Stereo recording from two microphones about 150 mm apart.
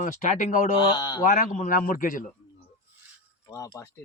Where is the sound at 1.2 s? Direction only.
60° left (ahead or behind).